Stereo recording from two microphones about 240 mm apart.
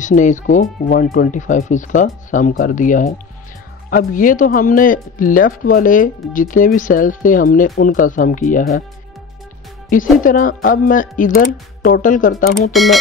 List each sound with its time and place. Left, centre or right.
0.0 s speech: left
9.8 s speech: left
12.7 s speech: centre